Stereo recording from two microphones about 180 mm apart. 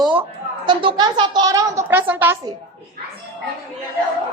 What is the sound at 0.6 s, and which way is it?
Speech, 25° right (ahead or behind).